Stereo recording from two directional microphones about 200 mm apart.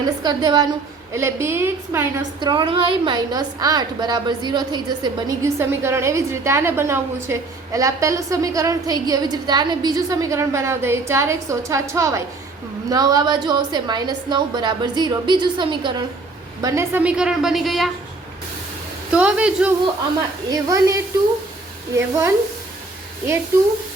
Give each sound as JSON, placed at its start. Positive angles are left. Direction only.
{"t": 0.2, "sound": "a woman's voice", "side_deg": -20}
{"t": 19.1, "sound": "a woman's voice", "side_deg": -5}
{"t": 20.5, "sound": "a woman's voice", "side_deg": -15}